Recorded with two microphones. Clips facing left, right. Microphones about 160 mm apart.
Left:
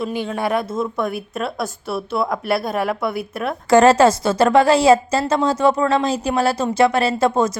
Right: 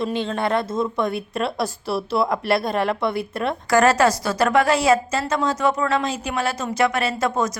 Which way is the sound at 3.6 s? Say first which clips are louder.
Left 5 dB; 25° left (ahead or behind).